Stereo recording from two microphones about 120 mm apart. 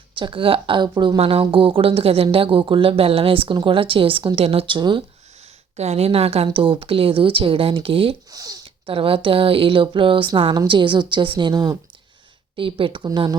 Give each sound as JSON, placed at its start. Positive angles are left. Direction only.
{"t": 0.2, "sound": "speech", "side_deg": -45}
{"t": 4.4, "sound": "speech", "side_deg": -55}
{"t": 5.7, "sound": "speech", "side_deg": -60}
{"t": 8.3, "sound": "speech", "side_deg": -30}
{"t": 8.6, "sound": "speech", "side_deg": -50}
{"t": 12.5, "sound": "speech", "side_deg": -45}